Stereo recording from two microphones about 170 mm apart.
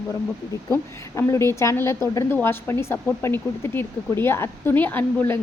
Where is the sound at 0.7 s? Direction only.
15° left (ahead or behind).